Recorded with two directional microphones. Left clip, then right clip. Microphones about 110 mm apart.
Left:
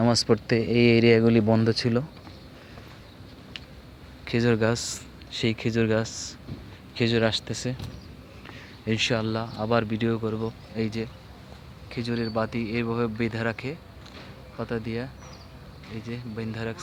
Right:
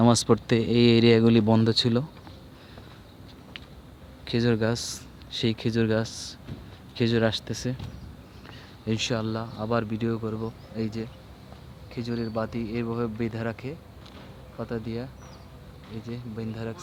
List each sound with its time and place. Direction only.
0.1 s speech: 40° right (ahead or behind)
4.3 s speech: 20° right (ahead or behind)
5.4 s speech: 30° right (ahead or behind)
8.9 s speech: 10° right (ahead or behind); by 16.8 s 10° left (ahead or behind)